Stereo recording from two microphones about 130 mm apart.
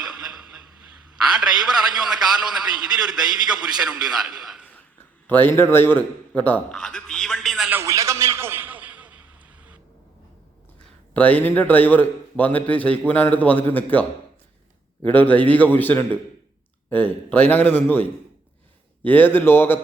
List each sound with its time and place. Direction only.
1.3 s a man's voice: 5° right (ahead or behind)
4.6 s a sound: 10° left (ahead or behind)
5.3 s speech: 15° left (ahead or behind)
7.7 s a sound: 20° right (ahead or behind)
11.1 s a man's voice: 15° left (ahead or behind)
15.0 s a man's voice: 10° left (ahead or behind)